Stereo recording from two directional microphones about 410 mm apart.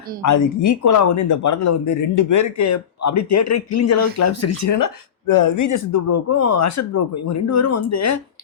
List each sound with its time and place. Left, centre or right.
0.2 s speech: left